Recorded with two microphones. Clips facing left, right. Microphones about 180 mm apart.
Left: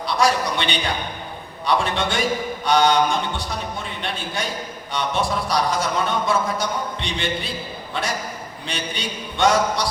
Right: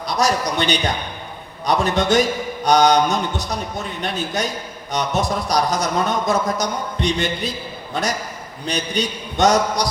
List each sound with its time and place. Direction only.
0.0 s a man's voice: 40° right (ahead or behind)